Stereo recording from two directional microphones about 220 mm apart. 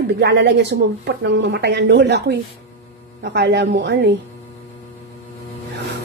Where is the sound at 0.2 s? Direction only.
50° right (ahead or behind).